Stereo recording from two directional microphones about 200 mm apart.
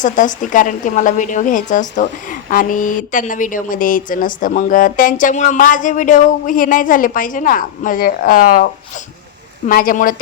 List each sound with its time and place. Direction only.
0.0 s a woman's voice: 40° left (ahead or behind)